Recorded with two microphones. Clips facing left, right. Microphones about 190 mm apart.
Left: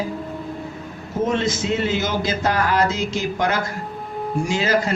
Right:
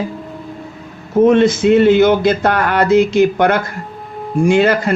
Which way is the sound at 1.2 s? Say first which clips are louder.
Right 11 dB; 60° right (ahead or behind).